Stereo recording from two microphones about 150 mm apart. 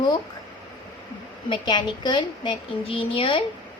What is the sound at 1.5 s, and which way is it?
A woman's voice, 30° left (ahead or behind).